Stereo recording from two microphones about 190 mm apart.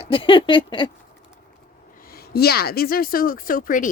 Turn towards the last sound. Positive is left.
turn(degrees=45)  # may be behind; listen again after turning